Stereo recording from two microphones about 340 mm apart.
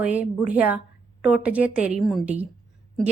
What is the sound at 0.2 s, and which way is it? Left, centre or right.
A woman's voice, centre.